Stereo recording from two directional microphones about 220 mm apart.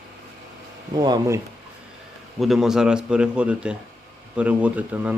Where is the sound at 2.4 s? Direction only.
Centre (ahead or behind).